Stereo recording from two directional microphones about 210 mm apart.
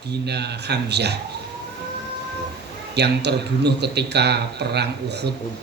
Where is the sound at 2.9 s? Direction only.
55° right (ahead or behind).